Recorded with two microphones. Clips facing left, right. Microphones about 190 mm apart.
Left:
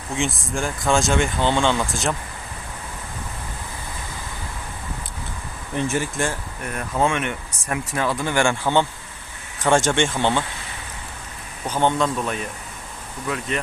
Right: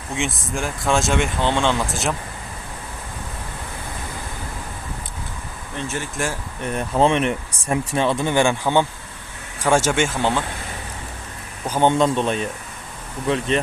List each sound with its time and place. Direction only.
0.1 s speech: centre (ahead or behind)
5.7 s speech: 10° left (ahead or behind)
6.7 s speech: 30° right (ahead or behind); by 10.4 s 5° right (ahead or behind)
11.6 s speech: 10° right (ahead or behind)
11.9 s speech: 20° right (ahead or behind)